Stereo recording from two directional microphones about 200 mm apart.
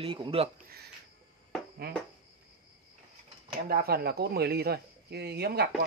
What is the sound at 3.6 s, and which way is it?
Speech, 50° right (ahead or behind).